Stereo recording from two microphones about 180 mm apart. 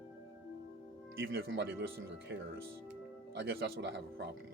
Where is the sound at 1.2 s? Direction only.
80° right.